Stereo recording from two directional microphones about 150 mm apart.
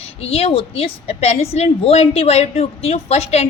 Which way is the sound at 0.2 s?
40° left (ahead or behind).